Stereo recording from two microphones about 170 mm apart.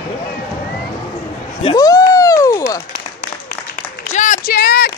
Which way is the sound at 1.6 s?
25° left (ahead or behind).